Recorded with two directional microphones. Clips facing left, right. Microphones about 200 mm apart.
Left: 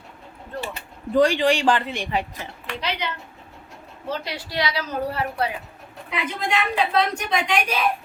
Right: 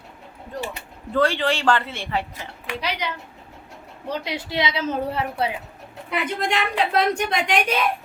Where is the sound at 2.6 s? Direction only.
10° right (ahead or behind).